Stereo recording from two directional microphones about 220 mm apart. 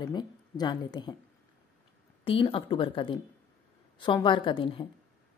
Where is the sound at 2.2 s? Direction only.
25° left (ahead or behind).